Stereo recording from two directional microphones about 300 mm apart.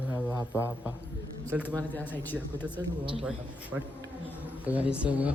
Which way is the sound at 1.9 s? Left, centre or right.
Centre.